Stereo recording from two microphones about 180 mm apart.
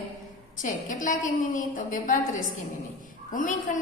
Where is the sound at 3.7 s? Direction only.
45° left (ahead or behind).